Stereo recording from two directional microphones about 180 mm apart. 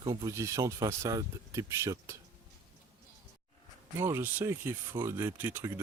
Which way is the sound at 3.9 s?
15° right (ahead or behind).